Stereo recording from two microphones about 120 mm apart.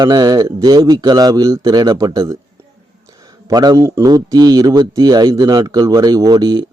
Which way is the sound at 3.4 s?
30° right (ahead or behind).